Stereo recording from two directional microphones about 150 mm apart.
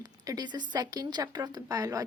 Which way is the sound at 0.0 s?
25° right (ahead or behind).